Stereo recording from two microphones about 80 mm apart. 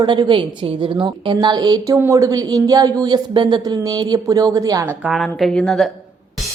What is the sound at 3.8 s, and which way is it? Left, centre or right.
Speech, right.